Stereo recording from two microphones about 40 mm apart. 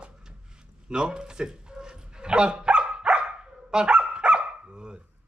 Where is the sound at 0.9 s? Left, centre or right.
Right.